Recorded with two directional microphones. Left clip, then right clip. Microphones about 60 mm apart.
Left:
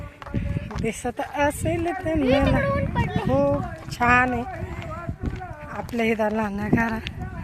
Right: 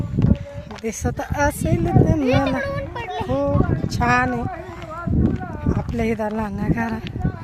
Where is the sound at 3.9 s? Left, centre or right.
Right.